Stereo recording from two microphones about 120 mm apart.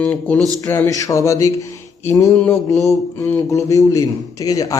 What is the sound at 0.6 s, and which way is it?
A man's voice, 25° left (ahead or behind).